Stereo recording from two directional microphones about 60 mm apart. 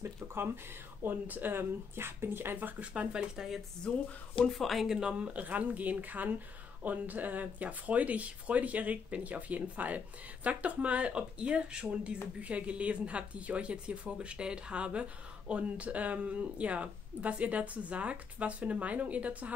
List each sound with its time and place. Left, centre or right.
0.0 s a sound: right
1.0 s speech: right
2.9 s speech: centre
3.3 s speech: centre
3.9 s speech: centre
5.2 s speech: right